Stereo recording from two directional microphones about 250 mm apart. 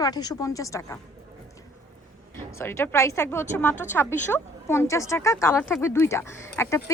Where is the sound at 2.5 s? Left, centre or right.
Centre.